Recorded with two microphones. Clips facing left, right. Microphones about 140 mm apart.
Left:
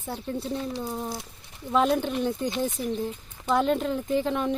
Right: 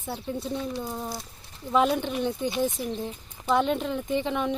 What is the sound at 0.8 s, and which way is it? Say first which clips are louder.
Speech: left 1 dB; 10° left (ahead or behind).